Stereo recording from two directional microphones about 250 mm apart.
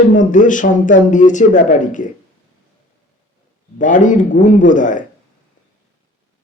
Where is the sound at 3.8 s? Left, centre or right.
Left.